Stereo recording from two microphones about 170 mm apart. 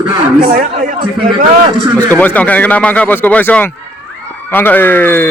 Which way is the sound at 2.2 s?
10° left (ahead or behind).